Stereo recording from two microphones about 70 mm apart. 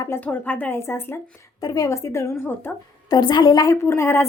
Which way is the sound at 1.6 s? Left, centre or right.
Left.